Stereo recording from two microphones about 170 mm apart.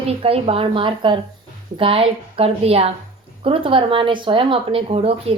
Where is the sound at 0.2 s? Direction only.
35° right (ahead or behind).